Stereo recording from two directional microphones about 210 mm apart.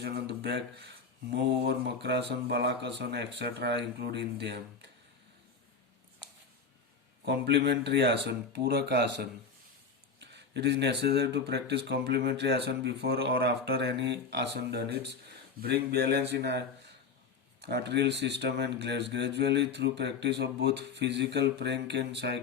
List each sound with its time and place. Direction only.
0.0 s speech: 50° right (ahead or behind)
7.3 s speech: 55° right (ahead or behind)
10.2 s a sound: 55° right (ahead or behind)
11.0 s speech: 50° right (ahead or behind)
17.6 s speech: 50° right (ahead or behind)